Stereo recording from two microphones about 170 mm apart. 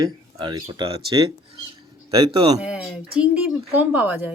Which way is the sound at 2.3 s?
35° right (ahead or behind).